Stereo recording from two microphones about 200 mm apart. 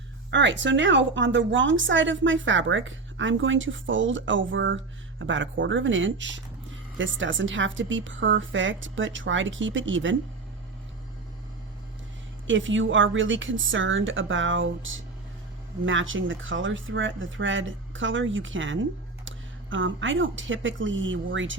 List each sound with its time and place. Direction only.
0.3 s speech: 65° right (ahead or behind)
12.5 s speech: 70° right (ahead or behind)